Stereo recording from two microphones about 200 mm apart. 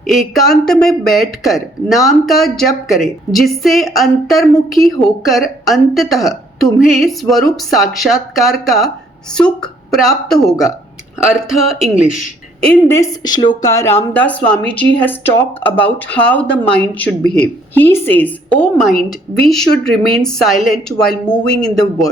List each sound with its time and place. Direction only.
0.1 s speech: centre (ahead or behind)
12.6 s speech: 10° left (ahead or behind)